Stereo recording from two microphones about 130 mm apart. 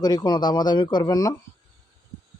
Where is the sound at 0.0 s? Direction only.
30° left (ahead or behind).